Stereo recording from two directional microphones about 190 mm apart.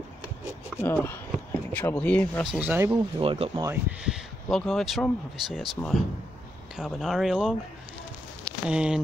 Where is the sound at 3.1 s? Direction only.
30° right (ahead or behind).